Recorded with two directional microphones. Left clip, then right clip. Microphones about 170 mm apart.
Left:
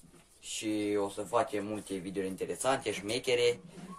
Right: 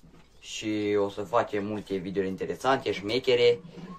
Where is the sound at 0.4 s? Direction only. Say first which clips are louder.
Right 4 dB; centre (ahead or behind).